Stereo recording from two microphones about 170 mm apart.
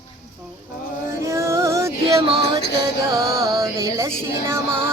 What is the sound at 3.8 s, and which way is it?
Speech, 20° right (ahead or behind).